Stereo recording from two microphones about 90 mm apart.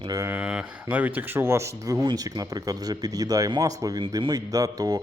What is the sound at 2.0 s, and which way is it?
Speech, 50° right (ahead or behind).